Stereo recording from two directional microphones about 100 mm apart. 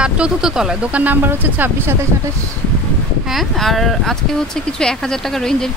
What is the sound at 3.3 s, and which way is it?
Speech, centre (ahead or behind).